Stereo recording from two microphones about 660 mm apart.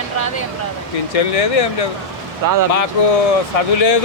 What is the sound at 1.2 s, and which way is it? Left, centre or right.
Speech, left.